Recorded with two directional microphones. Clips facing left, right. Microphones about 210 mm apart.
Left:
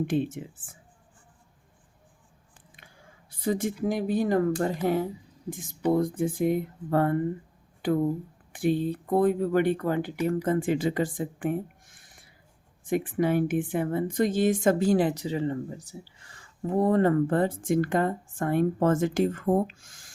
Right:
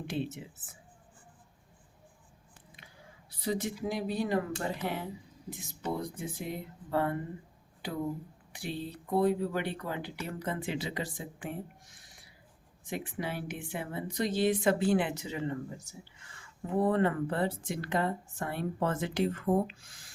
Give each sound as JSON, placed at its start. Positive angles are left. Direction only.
{"t": 0.1, "sound": "speech", "side_deg": 50}
{"t": 2.7, "sound": "a sound", "side_deg": 50}
{"t": 3.8, "sound": "speech", "side_deg": 50}